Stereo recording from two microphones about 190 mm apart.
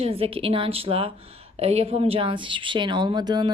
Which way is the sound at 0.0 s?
30° right (ahead or behind).